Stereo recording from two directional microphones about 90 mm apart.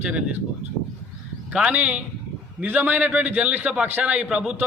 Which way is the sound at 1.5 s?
15° right (ahead or behind).